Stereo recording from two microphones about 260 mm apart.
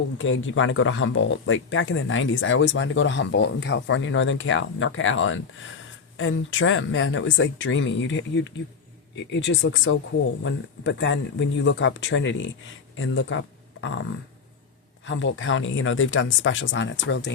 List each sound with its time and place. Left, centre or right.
0.2 s speech: left